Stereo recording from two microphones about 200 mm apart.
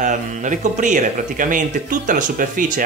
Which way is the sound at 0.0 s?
40° right (ahead or behind).